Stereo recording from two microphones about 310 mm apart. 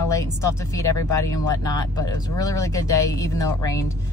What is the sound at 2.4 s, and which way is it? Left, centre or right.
Speech, centre.